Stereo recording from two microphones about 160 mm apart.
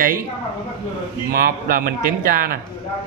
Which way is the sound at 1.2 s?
70° right (ahead or behind).